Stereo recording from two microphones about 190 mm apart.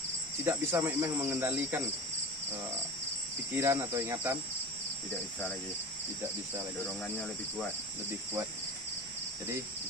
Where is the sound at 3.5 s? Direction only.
15° right (ahead or behind).